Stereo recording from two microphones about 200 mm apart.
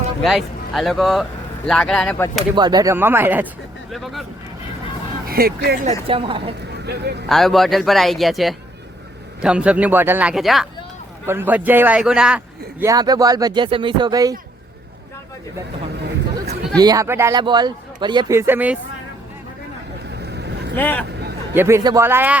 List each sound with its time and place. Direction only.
0.2 s speech: centre (ahead or behind)
2.6 s a man's voice: 20° right (ahead or behind); by 4.2 s centre (ahead or behind)
5.3 s speech: 50° right (ahead or behind)
5.8 s a man's voice: 30° right (ahead or behind)
6.8 s speech: 55° right (ahead or behind)
7.3 s a man's voice: centre (ahead or behind)
12.8 s a man's voice: 20° right (ahead or behind)
16.7 s a man's voice: 20° right (ahead or behind)
20.1 s boat: 55° right (ahead or behind)
20.7 s speech: 10° left (ahead or behind)
21.5 s a man's voice: 10° right (ahead or behind)